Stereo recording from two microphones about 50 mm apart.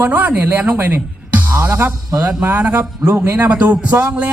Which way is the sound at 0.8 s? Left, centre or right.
Right.